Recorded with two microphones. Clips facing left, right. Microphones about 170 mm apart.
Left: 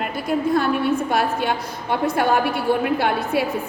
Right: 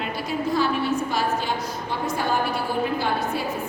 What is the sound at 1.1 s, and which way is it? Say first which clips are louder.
A woman's voice: left 4 dB; 60° left (ahead or behind).